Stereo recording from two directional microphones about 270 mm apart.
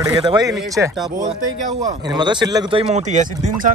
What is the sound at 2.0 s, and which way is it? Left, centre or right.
Speech, centre.